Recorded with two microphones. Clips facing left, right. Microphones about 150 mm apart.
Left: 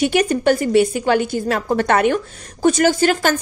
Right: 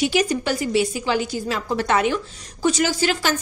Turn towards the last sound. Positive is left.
turn(degrees=50)  # may be behind; listen again after turning